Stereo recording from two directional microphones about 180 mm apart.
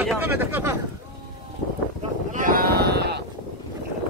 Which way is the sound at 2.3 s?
50° right (ahead or behind).